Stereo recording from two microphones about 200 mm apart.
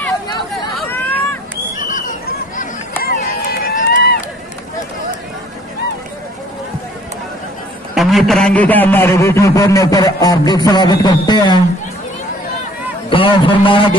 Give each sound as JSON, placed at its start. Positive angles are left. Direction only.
{"t": 0.8, "sound": "vehicle", "side_deg": 10}
{"t": 1.8, "sound": "chatter", "side_deg": 40}
{"t": 3.0, "sound": "run", "side_deg": 45}
{"t": 7.9, "sound": "a man's voice", "side_deg": 0}
{"t": 13.1, "sound": "a man's voice", "side_deg": 25}